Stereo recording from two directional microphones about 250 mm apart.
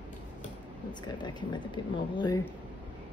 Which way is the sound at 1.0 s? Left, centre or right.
Centre.